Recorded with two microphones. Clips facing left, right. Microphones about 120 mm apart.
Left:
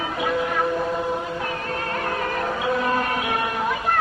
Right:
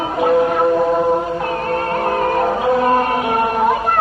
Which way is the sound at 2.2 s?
40° right (ahead or behind).